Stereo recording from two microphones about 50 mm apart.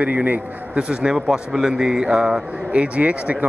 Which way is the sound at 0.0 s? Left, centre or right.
Right.